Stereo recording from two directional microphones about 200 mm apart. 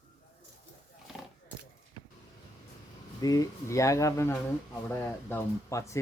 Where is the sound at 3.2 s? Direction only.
20° left (ahead or behind).